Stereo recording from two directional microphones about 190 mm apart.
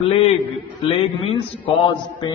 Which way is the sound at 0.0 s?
30° left (ahead or behind).